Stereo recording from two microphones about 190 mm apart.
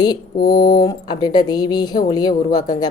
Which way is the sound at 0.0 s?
20° left (ahead or behind).